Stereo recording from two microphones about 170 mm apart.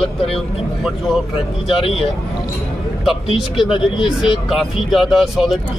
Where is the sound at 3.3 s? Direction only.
Centre (ahead or behind).